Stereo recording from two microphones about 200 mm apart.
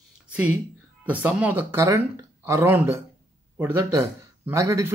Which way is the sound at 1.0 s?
5° right (ahead or behind).